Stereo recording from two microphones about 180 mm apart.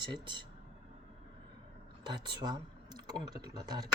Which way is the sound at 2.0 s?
25° right (ahead or behind).